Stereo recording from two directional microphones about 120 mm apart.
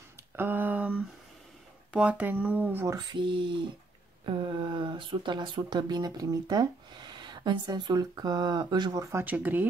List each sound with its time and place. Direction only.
0.4 s speech: 15° right (ahead or behind)
3.0 s speech: 40° right (ahead or behind)
9.2 s speech: 15° right (ahead or behind)